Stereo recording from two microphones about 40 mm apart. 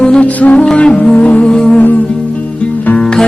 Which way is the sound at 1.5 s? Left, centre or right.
Centre.